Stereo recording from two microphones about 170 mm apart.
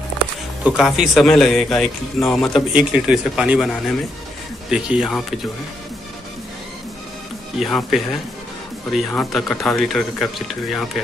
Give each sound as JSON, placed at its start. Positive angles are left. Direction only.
{"t": 0.7, "sound": "speech", "side_deg": -5}
{"t": 7.5, "sound": "speech", "side_deg": 0}